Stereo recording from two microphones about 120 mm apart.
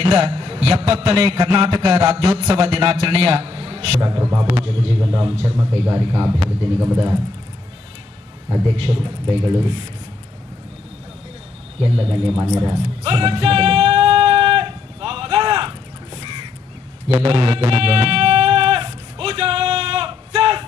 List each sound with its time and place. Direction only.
0.0 s a man's voice: 60° right (ahead or behind); by 6.9 s 40° right (ahead or behind)
8.7 s a man's voice: 50° right (ahead or behind)
11.9 s a man's voice: 50° right (ahead or behind)
13.0 s music: 50° right (ahead or behind)
16.1 s crow: 50° right (ahead or behind)
17.1 s music: 55° right (ahead or behind)